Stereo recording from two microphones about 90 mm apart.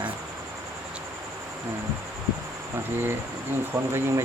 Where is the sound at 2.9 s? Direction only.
25° right (ahead or behind).